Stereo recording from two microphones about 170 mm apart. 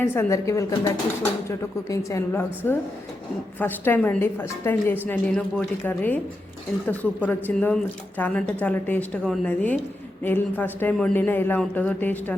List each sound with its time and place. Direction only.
0.0 s speech: 15° left (ahead or behind)